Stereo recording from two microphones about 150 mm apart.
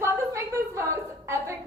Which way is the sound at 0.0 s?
20° right (ahead or behind).